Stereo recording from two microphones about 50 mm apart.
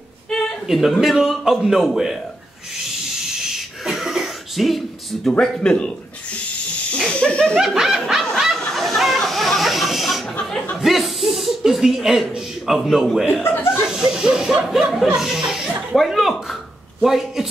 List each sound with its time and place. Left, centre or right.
0.7 s a man's voice: centre
3.2 s cough: centre
5.4 s speech: centre
7.1 s a sound: centre
7.5 s snicker: centre
8.4 s a sound: centre
10.8 s chuckle: centre
12.4 s a man's voice: centre
13.5 s chuckle: left
13.7 s chuckle: centre
15.9 s speech: centre